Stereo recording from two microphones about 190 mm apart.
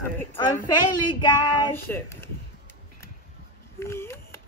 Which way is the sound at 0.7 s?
25° left (ahead or behind).